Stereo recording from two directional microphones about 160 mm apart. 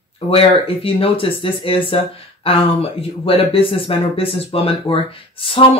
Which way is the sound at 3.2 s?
35° left (ahead or behind).